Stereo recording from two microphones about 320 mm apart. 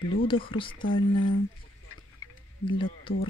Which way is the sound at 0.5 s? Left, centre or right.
Centre.